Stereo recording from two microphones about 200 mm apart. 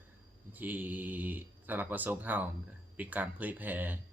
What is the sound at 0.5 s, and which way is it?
Speech, 10° right (ahead or behind).